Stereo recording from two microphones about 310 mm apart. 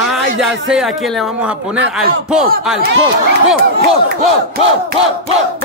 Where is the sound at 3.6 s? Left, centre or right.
Right.